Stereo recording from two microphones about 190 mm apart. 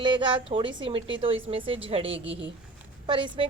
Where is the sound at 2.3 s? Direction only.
70° right (ahead or behind).